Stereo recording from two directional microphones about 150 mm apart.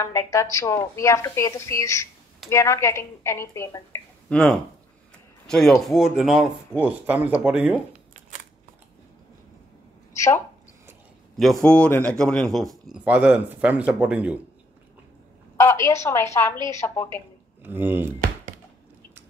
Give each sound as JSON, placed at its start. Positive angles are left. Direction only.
{"t": 0.0, "sound": "a woman's voice", "side_deg": 20}
{"t": 10.1, "sound": "a woman's voice", "side_deg": 20}
{"t": 11.3, "sound": "a man's voice", "side_deg": 5}
{"t": 15.5, "sound": "a woman's voice", "side_deg": 20}
{"t": 17.6, "sound": "speech", "side_deg": -15}